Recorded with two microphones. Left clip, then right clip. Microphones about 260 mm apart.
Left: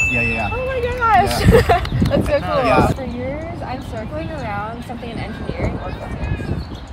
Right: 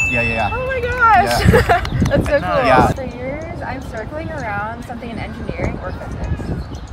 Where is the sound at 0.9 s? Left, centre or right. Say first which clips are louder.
Right 3 dB; centre.